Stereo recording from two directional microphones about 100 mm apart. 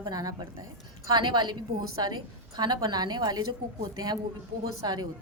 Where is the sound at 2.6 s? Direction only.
45° right (ahead or behind).